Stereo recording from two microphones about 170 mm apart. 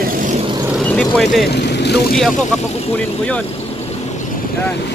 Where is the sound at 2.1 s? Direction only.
5° left (ahead or behind).